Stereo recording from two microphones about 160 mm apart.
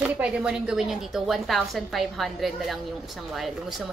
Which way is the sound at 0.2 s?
5° right (ahead or behind).